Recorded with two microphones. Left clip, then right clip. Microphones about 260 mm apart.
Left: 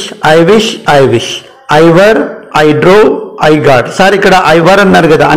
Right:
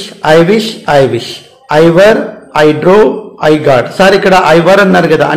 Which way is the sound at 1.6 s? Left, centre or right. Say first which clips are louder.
Left 1 dB; centre.